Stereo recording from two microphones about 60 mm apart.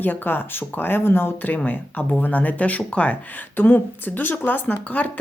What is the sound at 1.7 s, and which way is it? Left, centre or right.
Speech, left.